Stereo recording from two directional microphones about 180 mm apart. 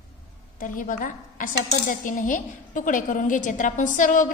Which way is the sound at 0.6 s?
50° left (ahead or behind).